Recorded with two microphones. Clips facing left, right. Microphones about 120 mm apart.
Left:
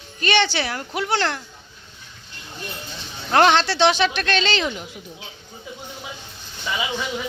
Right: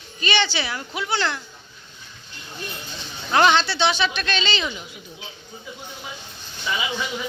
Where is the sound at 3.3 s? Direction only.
60° left (ahead or behind).